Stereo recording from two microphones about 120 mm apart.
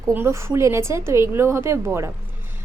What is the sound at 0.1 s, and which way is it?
A woman's voice, 20° right (ahead or behind).